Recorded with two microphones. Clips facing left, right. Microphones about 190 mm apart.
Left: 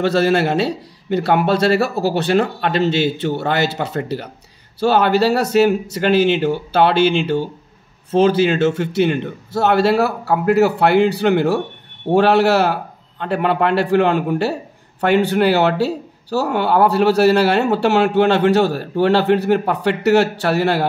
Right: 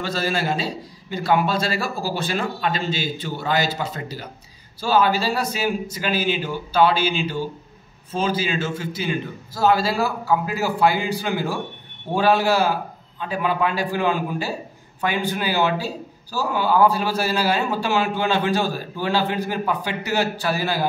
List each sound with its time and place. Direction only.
0.0 s a man's voice: 65° left (ahead or behind)